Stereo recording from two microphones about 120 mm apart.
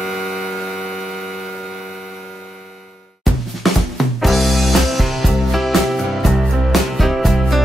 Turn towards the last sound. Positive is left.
turn(degrees=0)  # may be behind; listen again after turning